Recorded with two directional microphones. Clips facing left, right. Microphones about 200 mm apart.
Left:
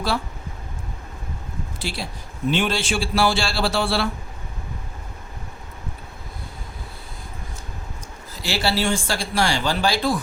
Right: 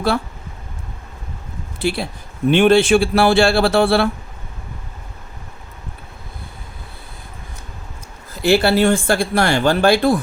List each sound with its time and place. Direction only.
1.8 s speech: 60° right (ahead or behind)
8.4 s speech: 55° right (ahead or behind)